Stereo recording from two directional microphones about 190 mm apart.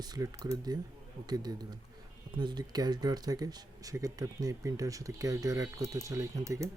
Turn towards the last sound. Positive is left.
turn(degrees=-15)  # may be behind; listen again after turning